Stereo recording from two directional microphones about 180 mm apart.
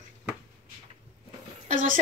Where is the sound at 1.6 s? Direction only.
45° right (ahead or behind).